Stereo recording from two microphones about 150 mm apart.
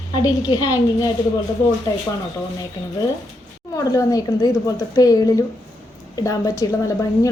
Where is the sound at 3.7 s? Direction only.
20° left (ahead or behind).